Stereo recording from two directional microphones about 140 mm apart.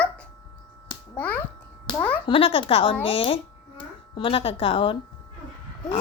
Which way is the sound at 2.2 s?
40° left (ahead or behind).